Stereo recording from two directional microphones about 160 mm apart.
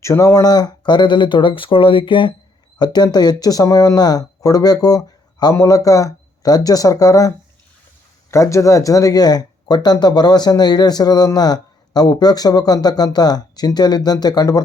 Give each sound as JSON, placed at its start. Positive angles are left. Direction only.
{"t": 0.0, "sound": "speech", "side_deg": 20}